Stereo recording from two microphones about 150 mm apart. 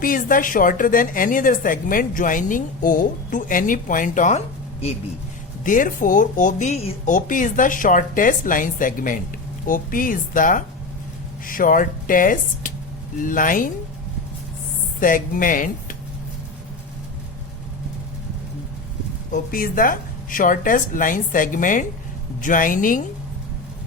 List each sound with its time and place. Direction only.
0.0 s a woman's voice: 65° left (ahead or behind); by 4.9 s 45° left (ahead or behind)
5.6 s a woman's voice: 65° left (ahead or behind)
15.0 s a woman's voice: 65° left (ahead or behind)
19.3 s a woman's voice: 70° left (ahead or behind)